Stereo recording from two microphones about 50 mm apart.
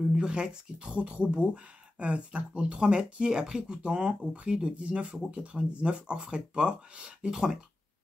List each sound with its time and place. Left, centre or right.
0.1 s speech: centre